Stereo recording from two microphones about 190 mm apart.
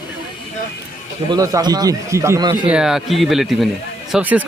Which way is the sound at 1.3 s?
20° right (ahead or behind).